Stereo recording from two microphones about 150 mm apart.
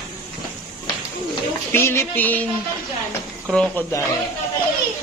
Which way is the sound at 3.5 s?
5° left (ahead or behind).